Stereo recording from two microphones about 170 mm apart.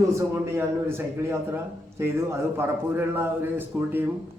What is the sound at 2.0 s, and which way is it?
A man's voice, 15° right (ahead or behind).